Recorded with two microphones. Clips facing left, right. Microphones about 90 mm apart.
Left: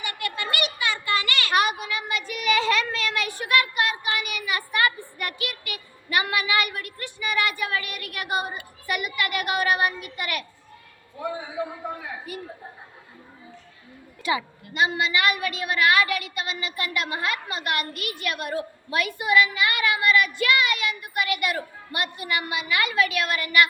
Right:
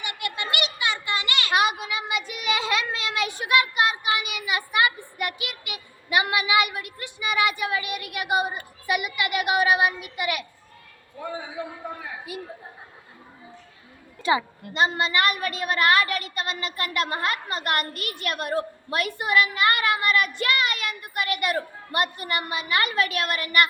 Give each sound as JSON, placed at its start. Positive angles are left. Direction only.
{"t": 0.0, "sound": "a sound", "side_deg": -20}
{"t": 8.9, "sound": "child singing", "side_deg": -15}
{"t": 11.6, "sound": "a man's voice", "side_deg": 10}
{"t": 14.3, "sound": "a woman's voice", "side_deg": -30}